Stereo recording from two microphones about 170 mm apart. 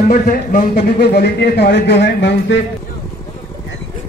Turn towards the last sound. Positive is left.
turn(degrees=90)